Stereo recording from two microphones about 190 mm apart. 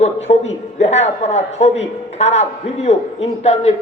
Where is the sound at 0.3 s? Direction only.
35° left (ahead or behind).